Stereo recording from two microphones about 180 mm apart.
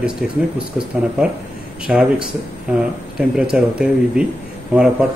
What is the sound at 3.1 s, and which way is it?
Speech, 5° right (ahead or behind).